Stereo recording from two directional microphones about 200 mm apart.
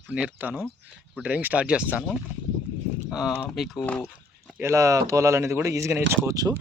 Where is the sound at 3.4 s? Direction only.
Centre (ahead or behind).